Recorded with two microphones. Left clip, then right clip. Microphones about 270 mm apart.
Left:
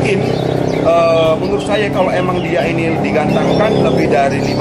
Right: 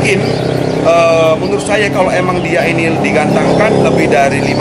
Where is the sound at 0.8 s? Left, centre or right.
Centre.